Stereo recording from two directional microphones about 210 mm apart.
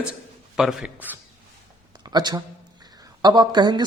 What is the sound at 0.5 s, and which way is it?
Speech, centre (ahead or behind).